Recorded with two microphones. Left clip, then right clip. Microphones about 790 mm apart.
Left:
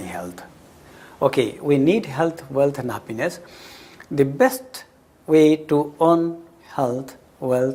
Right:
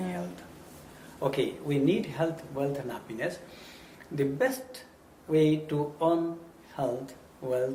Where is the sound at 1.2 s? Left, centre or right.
Left.